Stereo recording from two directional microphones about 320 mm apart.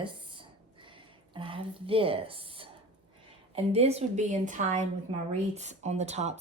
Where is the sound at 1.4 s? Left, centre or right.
Centre.